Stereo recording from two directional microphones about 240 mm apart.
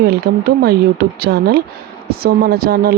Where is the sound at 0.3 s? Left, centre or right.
Right.